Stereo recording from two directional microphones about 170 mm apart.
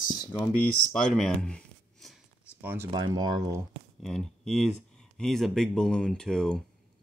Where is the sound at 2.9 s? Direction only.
25° right (ahead or behind).